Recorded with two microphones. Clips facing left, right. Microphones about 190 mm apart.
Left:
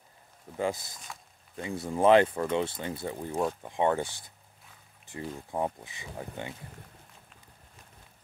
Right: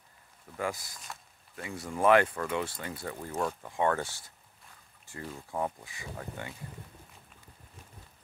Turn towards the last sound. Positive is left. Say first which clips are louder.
# left 2 dB
turn(degrees=20)  # may be behind; listen again after turning